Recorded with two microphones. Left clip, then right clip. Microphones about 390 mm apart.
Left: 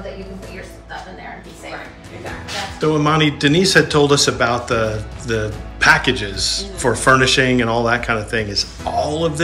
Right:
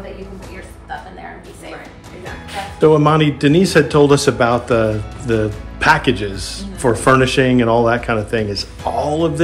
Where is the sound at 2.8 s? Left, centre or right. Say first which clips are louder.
Right 4 dB; centre.